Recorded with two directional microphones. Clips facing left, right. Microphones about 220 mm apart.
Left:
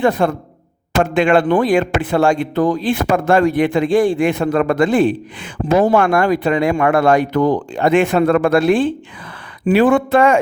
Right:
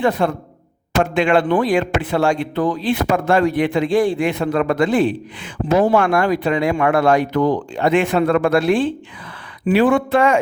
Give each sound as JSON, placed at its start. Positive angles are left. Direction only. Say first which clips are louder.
{"t": 0.2, "sound": "speech", "louder": "left 2 dB", "side_deg": 50}